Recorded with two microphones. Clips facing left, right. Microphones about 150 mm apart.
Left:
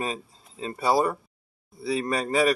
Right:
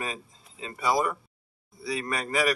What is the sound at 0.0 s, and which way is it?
A man's voice, 35° left (ahead or behind).